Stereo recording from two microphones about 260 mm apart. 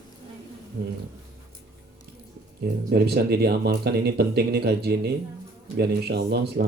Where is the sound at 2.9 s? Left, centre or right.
Right.